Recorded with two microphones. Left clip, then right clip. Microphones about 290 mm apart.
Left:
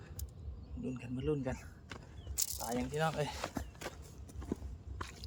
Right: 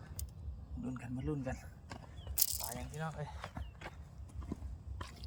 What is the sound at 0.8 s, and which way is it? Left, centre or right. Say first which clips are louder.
Speech: left 4 dB; centre.